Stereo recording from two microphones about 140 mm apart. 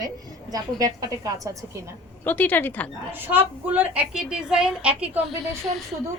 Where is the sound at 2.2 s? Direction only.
15° left (ahead or behind).